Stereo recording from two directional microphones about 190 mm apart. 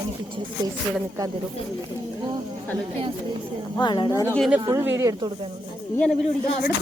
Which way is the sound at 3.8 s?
25° left (ahead or behind).